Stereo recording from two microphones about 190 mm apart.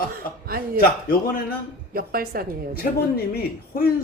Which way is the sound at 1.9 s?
50° right (ahead or behind).